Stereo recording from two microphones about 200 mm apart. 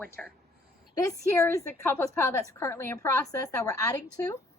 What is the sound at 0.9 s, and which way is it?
A woman's voice, 15° left (ahead or behind).